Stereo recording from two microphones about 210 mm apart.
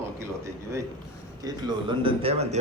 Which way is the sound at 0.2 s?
15° right (ahead or behind).